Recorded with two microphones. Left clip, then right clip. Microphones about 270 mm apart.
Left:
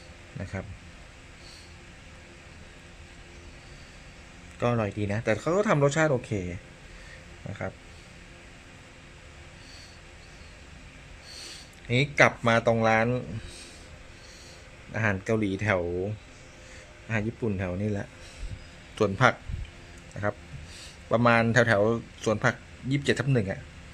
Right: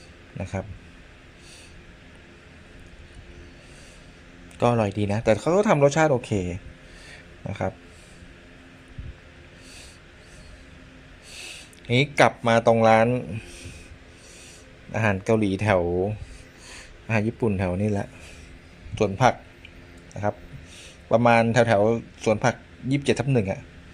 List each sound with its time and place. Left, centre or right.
4.6 s speech: centre
11.3 s speech: centre
14.9 s speech: centre
17.1 s speech: centre
18.9 s a man's voice: centre